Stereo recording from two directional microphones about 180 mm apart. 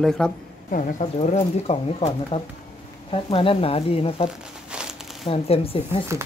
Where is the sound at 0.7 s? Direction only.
45° left (ahead or behind).